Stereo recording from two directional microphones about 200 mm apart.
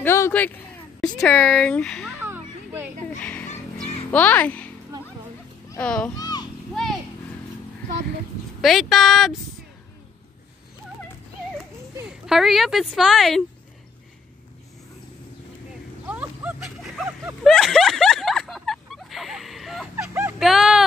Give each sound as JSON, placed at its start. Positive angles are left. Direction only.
{"t": 0.0, "sound": "a man's voice", "side_deg": 10}
{"t": 2.2, "sound": "children playing", "side_deg": -10}
{"t": 3.2, "sound": "music", "side_deg": 5}
{"t": 5.8, "sound": "speech", "side_deg": 5}
{"t": 6.1, "sound": "children playing", "side_deg": 20}
{"t": 8.5, "sound": "speech", "side_deg": 0}
{"t": 12.1, "sound": "speech", "side_deg": 0}
{"t": 16.1, "sound": "a sound", "side_deg": -5}
{"t": 20.0, "sound": "a sound", "side_deg": -10}